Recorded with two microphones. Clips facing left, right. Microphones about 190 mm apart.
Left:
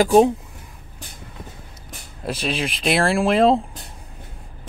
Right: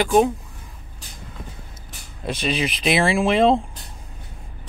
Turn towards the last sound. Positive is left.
turn(degrees=0)  # may be behind; listen again after turning